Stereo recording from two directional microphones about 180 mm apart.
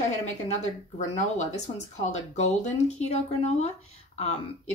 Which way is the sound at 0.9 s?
40° left (ahead or behind).